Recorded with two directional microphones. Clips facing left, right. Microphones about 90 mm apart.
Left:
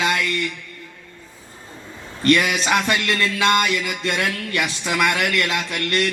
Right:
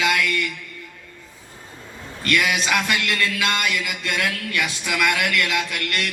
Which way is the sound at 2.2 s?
30° left (ahead or behind).